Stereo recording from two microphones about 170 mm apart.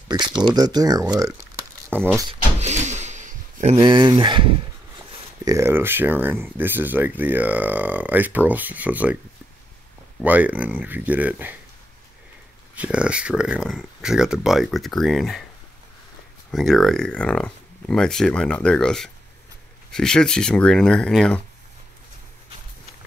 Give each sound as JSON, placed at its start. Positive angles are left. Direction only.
{"t": 0.1, "sound": "speech", "side_deg": -25}
{"t": 1.1, "sound": "crumpling", "side_deg": -15}
{"t": 2.6, "sound": "a sound", "side_deg": -40}
{"t": 3.7, "sound": "speech", "side_deg": -25}
{"t": 5.4, "sound": "speech", "side_deg": -20}
{"t": 10.2, "sound": "speech", "side_deg": -10}
{"t": 12.7, "sound": "speech", "side_deg": -5}
{"t": 16.5, "sound": "speech", "side_deg": 0}